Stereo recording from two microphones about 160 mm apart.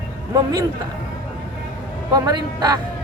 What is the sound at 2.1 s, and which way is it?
Speech, 25° right (ahead or behind).